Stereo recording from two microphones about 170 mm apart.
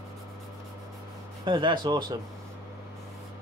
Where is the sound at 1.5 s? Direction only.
25° right (ahead or behind).